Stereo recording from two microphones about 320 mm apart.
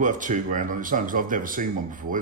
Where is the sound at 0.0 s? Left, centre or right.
Right.